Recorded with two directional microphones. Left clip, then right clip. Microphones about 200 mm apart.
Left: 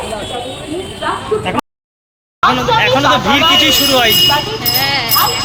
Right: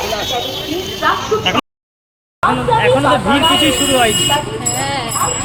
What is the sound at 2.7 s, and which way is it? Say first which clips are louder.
Speech: left 1 dB; 5° left (ahead or behind).